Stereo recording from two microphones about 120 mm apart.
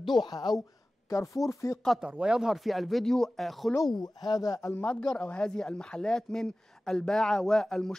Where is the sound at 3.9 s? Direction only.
35° left (ahead or behind).